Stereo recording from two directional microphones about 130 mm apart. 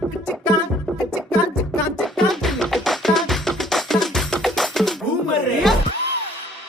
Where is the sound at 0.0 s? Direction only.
Centre (ahead or behind).